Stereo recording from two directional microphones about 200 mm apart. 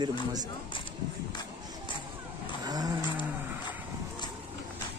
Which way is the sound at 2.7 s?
20° right (ahead or behind).